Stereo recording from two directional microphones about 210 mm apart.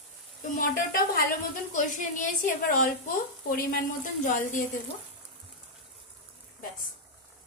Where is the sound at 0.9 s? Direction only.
45° left (ahead or behind).